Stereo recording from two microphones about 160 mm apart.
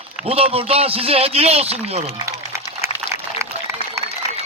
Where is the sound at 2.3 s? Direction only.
15° right (ahead or behind).